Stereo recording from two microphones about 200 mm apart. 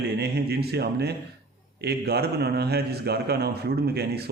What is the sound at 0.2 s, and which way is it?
A man's voice, 55° right (ahead or behind).